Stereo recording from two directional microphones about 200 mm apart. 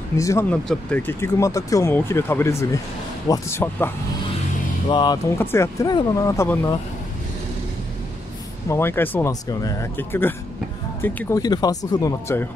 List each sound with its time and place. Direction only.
0.2 s speech: 15° left (ahead or behind)
4.8 s speech: 20° left (ahead or behind)
8.6 s speech: 10° left (ahead or behind)